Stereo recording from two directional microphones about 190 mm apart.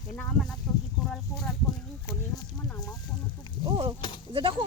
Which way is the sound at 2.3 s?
20° left (ahead or behind).